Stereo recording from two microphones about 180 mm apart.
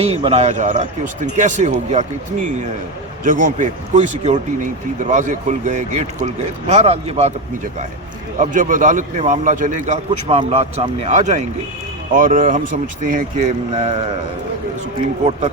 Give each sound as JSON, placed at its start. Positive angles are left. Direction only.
{"t": 0.0, "sound": "speech", "side_deg": -35}
{"t": 3.2, "sound": "speech", "side_deg": -45}
{"t": 8.4, "sound": "speech", "side_deg": -45}